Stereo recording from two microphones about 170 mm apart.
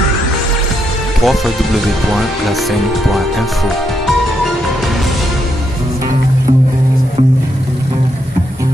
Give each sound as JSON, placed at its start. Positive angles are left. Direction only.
{"t": 1.2, "sound": "speech", "side_deg": 0}